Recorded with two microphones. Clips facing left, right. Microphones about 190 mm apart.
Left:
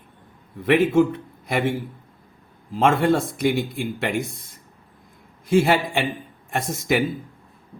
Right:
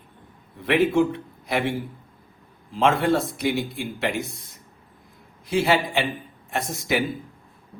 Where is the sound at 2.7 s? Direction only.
45° left (ahead or behind).